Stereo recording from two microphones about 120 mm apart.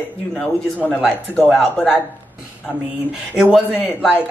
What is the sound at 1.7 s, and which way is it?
Speech, 10° left (ahead or behind).